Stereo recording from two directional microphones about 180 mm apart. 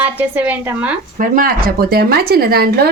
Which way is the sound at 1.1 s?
45° right (ahead or behind).